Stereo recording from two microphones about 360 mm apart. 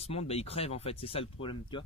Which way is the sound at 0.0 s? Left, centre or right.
Centre.